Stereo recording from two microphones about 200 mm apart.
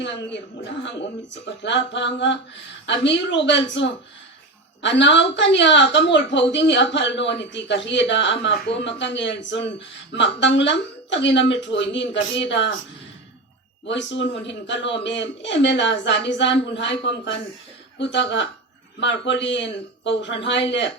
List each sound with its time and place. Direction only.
1.6 s a man's voice: 65° left (ahead or behind)
13.8 s a man's voice: 65° left (ahead or behind)